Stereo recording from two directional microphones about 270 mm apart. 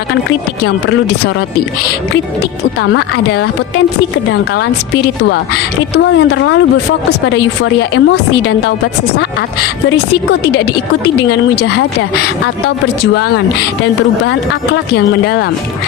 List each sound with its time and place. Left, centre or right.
0.3 s speech: left
2.9 s speech: left
5.9 s a woman's voice: left
7.6 s speech: left
14.3 s speech: left